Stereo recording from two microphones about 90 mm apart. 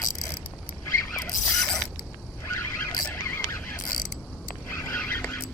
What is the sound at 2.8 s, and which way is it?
Cricket, 25° left (ahead or behind).